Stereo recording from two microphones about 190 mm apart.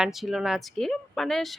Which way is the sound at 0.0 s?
Centre (ahead or behind).